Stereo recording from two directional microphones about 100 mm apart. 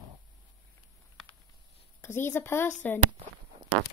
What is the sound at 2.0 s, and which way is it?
Speech, 25° left (ahead or behind).